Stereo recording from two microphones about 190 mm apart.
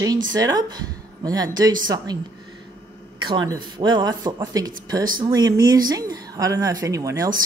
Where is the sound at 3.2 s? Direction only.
25° right (ahead or behind).